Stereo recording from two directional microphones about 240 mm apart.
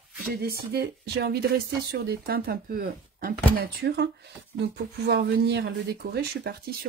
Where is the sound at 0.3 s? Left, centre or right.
Right.